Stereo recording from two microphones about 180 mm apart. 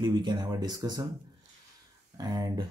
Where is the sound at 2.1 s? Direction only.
20° right (ahead or behind).